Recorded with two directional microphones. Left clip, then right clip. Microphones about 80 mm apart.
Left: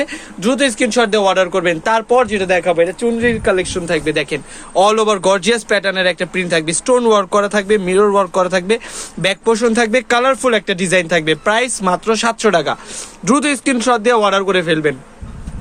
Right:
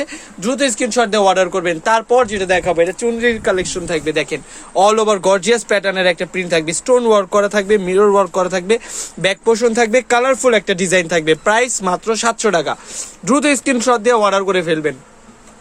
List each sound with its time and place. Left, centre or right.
0.0 s speech: centre; by 2.0 s right
2.0 s a man's voice: right
3.8 s speech: right
13.2 s speech: centre